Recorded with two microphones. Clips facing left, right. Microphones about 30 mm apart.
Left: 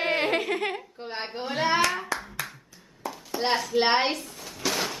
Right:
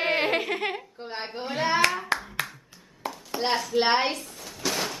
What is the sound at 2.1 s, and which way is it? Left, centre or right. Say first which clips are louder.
Clapping: right 3 dB; right.